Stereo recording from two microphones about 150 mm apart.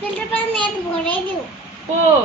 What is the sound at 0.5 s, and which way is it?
Speech, 10° left (ahead or behind).